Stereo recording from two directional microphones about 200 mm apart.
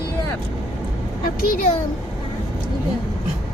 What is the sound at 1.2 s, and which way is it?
Speech, 45° left (ahead or behind).